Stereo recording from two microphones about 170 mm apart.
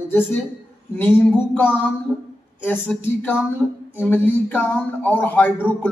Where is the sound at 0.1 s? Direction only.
10° left (ahead or behind).